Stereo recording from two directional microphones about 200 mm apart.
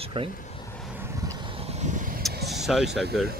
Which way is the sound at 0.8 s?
10° right (ahead or behind).